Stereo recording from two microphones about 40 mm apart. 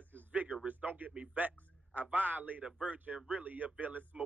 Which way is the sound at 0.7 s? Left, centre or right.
Right.